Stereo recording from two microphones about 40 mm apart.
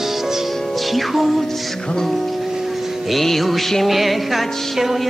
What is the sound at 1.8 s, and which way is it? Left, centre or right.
Speech, centre.